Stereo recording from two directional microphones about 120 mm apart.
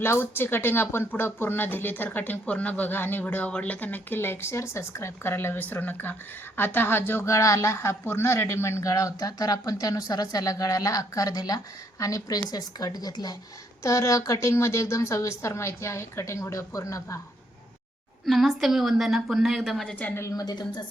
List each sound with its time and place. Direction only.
0.0 s a woman's voice: 20° left (ahead or behind)
18.3 s a woman's voice: centre (ahead or behind)
20.2 s a woman's voice: 30° left (ahead or behind)